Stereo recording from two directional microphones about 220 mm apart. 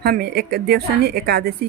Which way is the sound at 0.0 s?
45° right (ahead or behind).